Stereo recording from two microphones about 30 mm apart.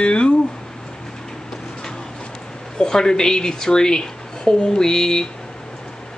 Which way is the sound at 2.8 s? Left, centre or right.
Left.